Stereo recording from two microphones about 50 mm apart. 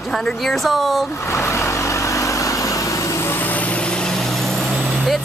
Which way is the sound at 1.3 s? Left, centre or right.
Left.